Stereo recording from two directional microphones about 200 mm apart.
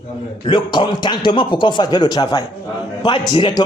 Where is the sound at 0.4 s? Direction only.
25° left (ahead or behind).